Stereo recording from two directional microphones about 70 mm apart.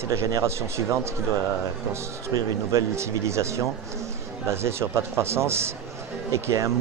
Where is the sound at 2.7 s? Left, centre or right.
Right.